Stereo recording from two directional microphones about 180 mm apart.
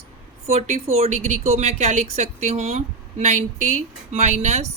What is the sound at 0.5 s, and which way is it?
A woman's voice, 35° right (ahead or behind).